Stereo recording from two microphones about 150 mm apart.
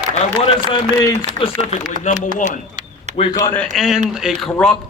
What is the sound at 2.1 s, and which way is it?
Speech, 55° left (ahead or behind).